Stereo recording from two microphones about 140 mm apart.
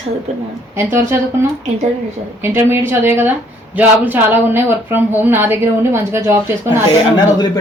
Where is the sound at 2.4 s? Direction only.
15° right (ahead or behind).